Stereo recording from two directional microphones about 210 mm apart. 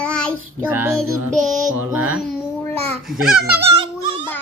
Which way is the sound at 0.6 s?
10° right (ahead or behind).